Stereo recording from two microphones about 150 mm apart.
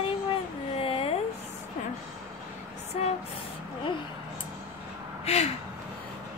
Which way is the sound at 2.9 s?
45° left (ahead or behind).